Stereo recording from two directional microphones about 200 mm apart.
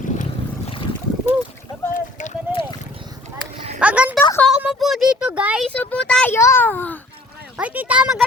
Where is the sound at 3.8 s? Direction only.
5° right (ahead or behind).